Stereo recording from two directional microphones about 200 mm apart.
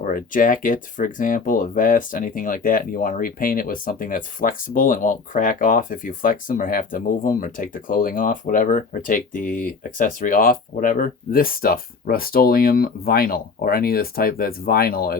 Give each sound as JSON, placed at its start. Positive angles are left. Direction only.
{"t": 0.0, "sound": "speech", "side_deg": 40}